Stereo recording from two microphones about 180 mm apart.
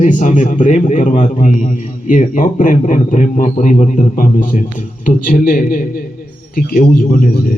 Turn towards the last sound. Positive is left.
turn(degrees=55)  # may be behind; listen again after turning